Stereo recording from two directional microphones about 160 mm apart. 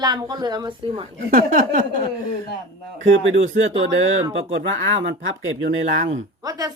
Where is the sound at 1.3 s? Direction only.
55° right (ahead or behind).